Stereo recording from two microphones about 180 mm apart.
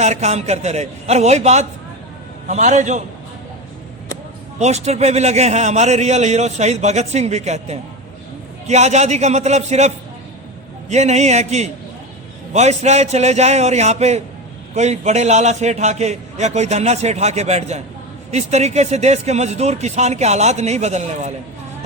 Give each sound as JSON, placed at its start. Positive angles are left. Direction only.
{"t": 0.0, "sound": "a man's voice", "side_deg": -40}
{"t": 4.6, "sound": "a man's voice", "side_deg": -35}